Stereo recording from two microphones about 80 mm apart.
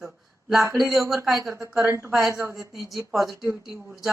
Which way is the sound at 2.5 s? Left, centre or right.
Centre.